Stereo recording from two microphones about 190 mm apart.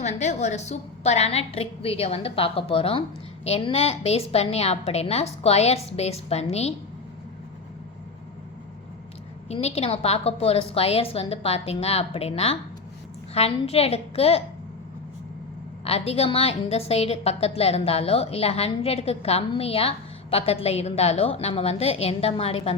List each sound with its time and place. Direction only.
0.0 s a woman's voice: 35° left (ahead or behind)
9.5 s a woman's voice: 35° left (ahead or behind)
15.8 s a woman's voice: 30° left (ahead or behind)